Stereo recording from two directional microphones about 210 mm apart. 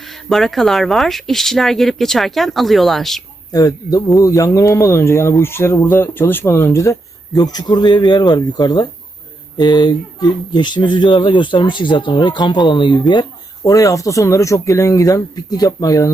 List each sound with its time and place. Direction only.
0.0 s speech: centre (ahead or behind)
3.5 s speech: 20° left (ahead or behind)